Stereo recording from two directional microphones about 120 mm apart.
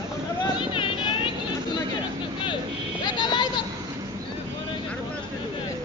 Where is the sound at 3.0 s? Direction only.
35° left (ahead or behind).